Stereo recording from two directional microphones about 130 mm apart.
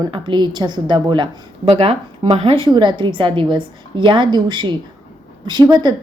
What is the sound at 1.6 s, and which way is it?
A woman's voice, 50° right (ahead or behind).